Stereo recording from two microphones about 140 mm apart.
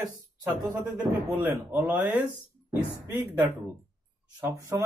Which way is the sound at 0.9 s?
10° right (ahead or behind).